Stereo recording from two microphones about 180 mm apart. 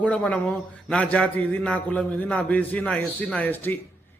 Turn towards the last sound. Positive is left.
turn(degrees=10)  # may be behind; listen again after turning